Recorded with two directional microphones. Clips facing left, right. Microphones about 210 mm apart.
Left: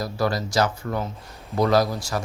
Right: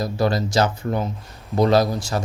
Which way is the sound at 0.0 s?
25° right (ahead or behind).